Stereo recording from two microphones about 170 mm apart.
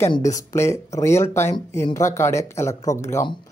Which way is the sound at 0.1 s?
20° left (ahead or behind).